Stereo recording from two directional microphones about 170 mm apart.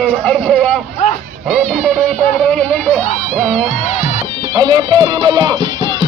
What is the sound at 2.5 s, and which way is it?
Speech, 10° left (ahead or behind).